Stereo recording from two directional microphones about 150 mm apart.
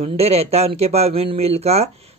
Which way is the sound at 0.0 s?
40° right (ahead or behind).